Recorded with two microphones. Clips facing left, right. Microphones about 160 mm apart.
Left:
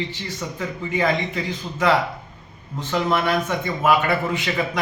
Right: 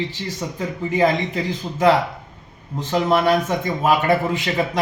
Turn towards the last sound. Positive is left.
turn(degrees=-35)  # may be behind; listen again after turning